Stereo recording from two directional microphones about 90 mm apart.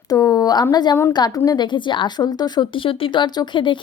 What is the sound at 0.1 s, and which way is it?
A woman's voice, 40° left (ahead or behind).